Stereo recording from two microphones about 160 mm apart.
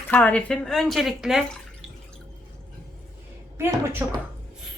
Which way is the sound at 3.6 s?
15° right (ahead or behind).